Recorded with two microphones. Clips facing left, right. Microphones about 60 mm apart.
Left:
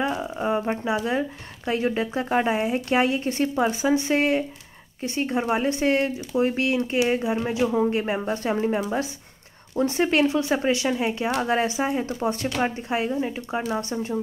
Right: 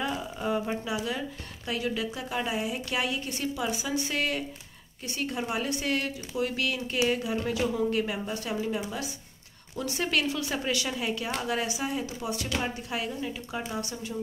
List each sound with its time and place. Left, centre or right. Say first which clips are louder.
0.0 s speech: left 6 dB; left